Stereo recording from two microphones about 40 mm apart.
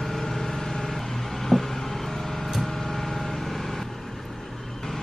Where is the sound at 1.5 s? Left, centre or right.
Centre.